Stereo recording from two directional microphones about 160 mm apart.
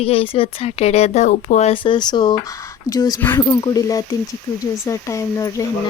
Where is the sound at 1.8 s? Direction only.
25° left (ahead or behind).